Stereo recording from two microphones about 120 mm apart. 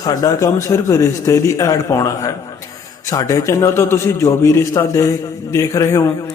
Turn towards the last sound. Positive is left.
turn(degrees=25)  # may be behind; listen again after turning